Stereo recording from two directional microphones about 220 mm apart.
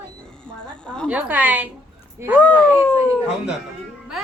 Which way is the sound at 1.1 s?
5° right (ahead or behind).